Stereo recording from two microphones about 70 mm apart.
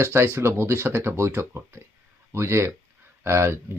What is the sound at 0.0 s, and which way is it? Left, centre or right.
Speech, right.